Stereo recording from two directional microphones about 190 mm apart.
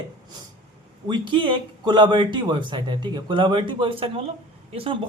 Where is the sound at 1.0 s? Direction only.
25° right (ahead or behind).